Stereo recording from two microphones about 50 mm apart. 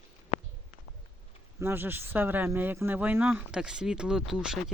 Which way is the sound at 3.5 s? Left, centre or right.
Centre.